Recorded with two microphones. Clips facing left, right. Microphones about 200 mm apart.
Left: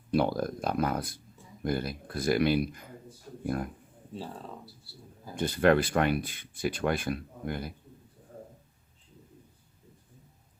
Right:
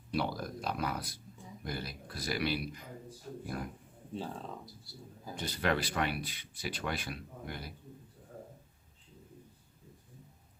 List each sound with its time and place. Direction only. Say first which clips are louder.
0.1 s speech: left 8 dB; 50° left (ahead or behind)
4.1 s speech: even; 5° left (ahead or behind)
5.4 s speech: left 9 dB; 50° left (ahead or behind)